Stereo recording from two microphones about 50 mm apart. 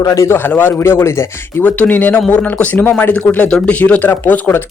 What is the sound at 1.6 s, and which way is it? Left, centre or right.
Speech, left.